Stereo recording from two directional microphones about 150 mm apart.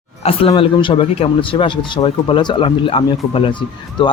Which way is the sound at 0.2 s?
40° left (ahead or behind).